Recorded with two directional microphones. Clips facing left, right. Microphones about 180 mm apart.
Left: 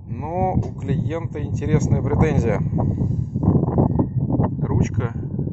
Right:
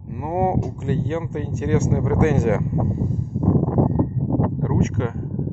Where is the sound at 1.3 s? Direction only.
10° left (ahead or behind).